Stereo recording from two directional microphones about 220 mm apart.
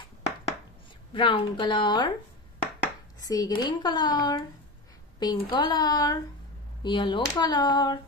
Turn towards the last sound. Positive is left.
turn(degrees=20)  # may be behind; listen again after turning